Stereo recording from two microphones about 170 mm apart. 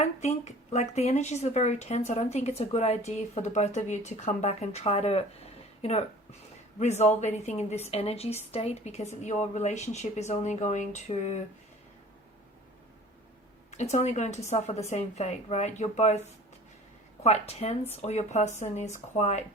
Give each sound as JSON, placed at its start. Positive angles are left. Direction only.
{"t": 0.0, "sound": "speech", "side_deg": 40}
{"t": 13.7, "sound": "speech", "side_deg": 40}
{"t": 17.2, "sound": "speech", "side_deg": 40}